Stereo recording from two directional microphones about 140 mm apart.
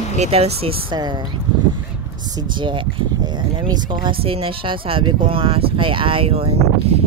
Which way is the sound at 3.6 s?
35° right (ahead or behind).